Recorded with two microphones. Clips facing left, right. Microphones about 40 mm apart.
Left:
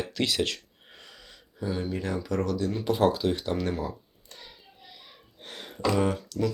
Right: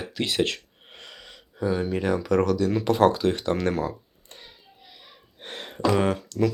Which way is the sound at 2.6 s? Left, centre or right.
Right.